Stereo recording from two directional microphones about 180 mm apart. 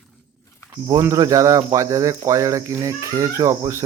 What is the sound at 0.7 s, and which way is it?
Speech, 20° right (ahead or behind).